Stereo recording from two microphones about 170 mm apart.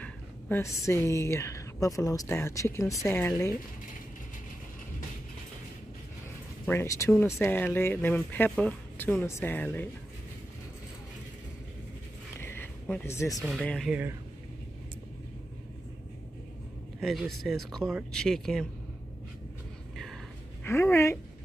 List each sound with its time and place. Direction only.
0.0 s a woman's voice: 15° left (ahead or behind)
6.6 s speech: 15° left (ahead or behind)
12.4 s a sound: 15° left (ahead or behind)
13.4 s speech: centre (ahead or behind)
17.0 s speech: centre (ahead or behind)
20.6 s speech: 15° left (ahead or behind)